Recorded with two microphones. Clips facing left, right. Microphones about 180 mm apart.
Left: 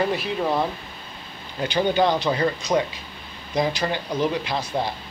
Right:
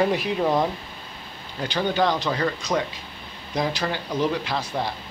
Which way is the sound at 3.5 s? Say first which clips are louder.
Left 2 dB; centre (ahead or behind).